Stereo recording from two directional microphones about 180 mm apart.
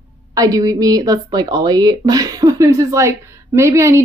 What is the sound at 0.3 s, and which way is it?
A woman's voice, 20° right (ahead or behind).